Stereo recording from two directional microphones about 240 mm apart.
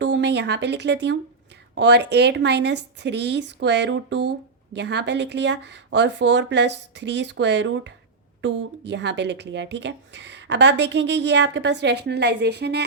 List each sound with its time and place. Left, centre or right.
0.0 s speech: right